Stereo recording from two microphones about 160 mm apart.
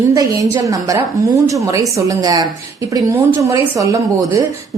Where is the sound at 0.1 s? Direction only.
20° right (ahead or behind).